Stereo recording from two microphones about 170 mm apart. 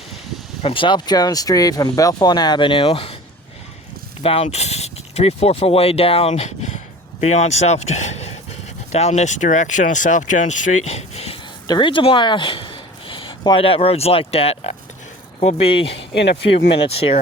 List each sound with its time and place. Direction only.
0.6 s speech: 30° left (ahead or behind)
4.2 s speech: 35° left (ahead or behind)
16.2 s speech: 85° left